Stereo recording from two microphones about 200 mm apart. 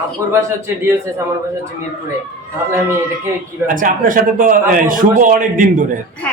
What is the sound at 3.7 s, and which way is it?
A man's voice, 40° right (ahead or behind).